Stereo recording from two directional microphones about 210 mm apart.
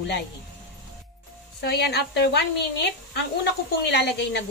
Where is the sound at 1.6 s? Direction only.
50° left (ahead or behind).